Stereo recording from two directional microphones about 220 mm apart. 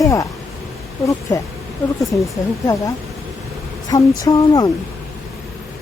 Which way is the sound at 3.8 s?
15° left (ahead or behind).